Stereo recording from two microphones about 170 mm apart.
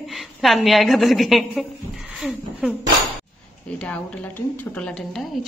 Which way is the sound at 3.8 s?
5° left (ahead or behind).